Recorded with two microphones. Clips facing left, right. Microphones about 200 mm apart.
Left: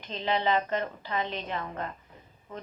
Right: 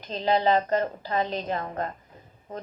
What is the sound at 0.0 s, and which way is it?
A woman's voice, 40° right (ahead or behind).